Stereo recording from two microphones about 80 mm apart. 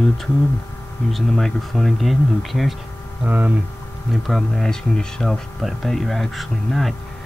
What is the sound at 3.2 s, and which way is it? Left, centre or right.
Speech, centre.